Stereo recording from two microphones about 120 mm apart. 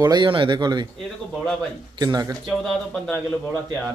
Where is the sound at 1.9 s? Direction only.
35° right (ahead or behind).